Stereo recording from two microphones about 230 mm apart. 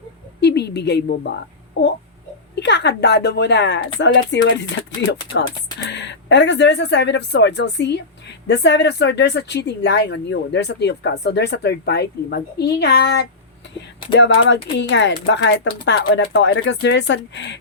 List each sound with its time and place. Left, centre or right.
0.3 s a woman's voice: left
2.6 s speech: left